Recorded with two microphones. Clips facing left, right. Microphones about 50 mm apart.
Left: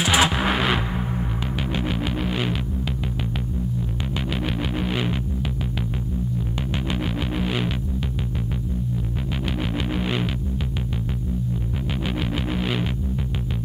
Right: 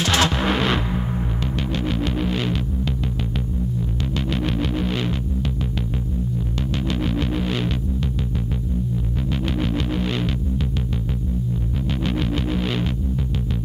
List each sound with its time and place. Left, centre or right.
0.0 s music: centre
1.8 s music: centre
4.3 s music: centre
6.9 s music: centre
9.6 s music: centre
12.0 s music: centre